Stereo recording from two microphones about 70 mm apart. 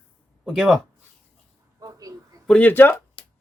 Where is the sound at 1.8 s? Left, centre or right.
Right.